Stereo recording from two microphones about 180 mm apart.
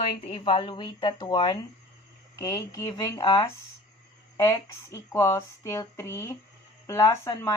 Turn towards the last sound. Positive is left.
turn(degrees=20)  # may be behind; listen again after turning